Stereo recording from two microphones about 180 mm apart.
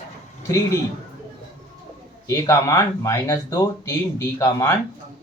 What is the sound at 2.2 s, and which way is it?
Speech, 15° left (ahead or behind).